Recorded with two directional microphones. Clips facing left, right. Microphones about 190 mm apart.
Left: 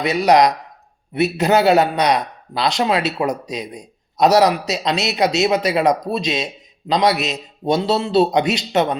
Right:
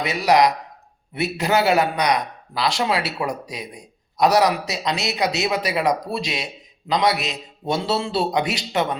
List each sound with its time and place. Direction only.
0.0 s a man's voice: 20° left (ahead or behind)